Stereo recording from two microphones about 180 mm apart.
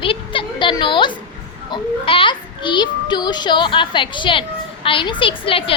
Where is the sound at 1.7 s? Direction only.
30° left (ahead or behind).